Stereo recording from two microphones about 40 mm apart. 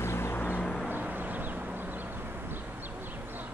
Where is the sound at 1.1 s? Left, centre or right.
Right.